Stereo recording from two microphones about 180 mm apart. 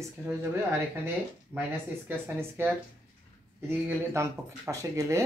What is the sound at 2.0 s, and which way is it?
Speech, 10° right (ahead or behind).